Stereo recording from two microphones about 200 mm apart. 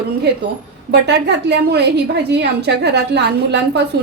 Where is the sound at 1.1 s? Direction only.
60° right (ahead or behind).